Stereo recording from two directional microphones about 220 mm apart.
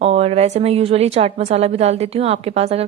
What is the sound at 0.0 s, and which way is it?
A woman's voice, 30° right (ahead or behind).